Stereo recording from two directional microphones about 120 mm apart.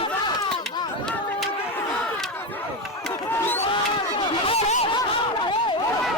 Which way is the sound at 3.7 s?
45° left (ahead or behind).